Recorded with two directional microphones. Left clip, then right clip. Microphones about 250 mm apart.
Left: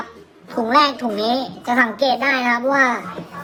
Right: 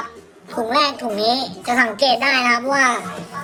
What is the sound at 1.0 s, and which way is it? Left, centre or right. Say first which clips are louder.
A woman's voice: right 1 dB; left.